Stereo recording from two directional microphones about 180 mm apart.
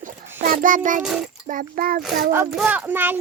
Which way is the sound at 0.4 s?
50° right (ahead or behind).